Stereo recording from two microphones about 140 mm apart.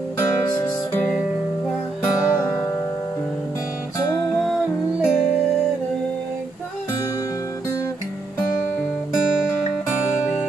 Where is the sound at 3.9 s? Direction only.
25° left (ahead or behind).